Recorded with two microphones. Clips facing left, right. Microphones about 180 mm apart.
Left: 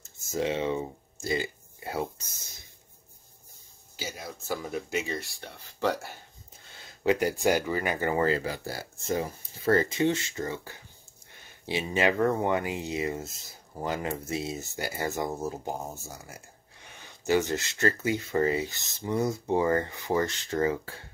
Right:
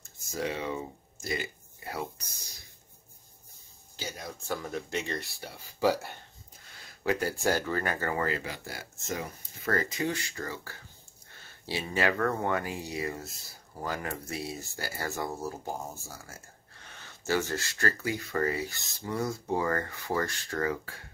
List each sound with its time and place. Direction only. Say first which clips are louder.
0.0 s speech: left 4 dB; 25° left (ahead or behind)
3.9 s speech: left 1 dB; 5° left (ahead or behind)
7.0 s speech: left 4 dB; 20° left (ahead or behind)